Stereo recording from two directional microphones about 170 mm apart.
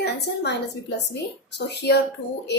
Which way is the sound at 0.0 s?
80° left.